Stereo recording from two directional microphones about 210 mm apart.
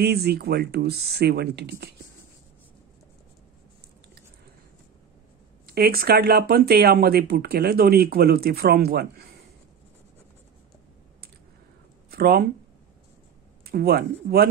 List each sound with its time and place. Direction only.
0.0 s speech: 50° right (ahead or behind)
5.7 s speech: 45° right (ahead or behind)
12.1 s speech: 45° right (ahead or behind)
13.7 s speech: 50° right (ahead or behind)